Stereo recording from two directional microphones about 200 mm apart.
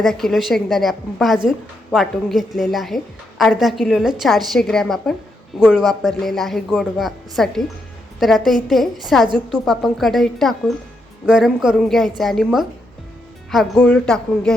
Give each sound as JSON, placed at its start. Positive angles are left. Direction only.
{"t": 0.0, "sound": "a woman's voice", "side_deg": 0}